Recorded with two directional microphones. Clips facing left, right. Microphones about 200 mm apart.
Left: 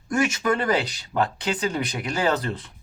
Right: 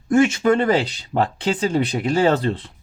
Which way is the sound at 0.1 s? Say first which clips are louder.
Right 7 dB; 25° right (ahead or behind).